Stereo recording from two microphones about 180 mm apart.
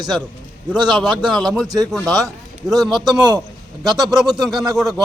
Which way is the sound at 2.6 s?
Centre (ahead or behind).